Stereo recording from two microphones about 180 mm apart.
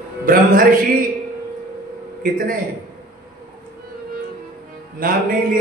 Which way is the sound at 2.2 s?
55° right (ahead or behind).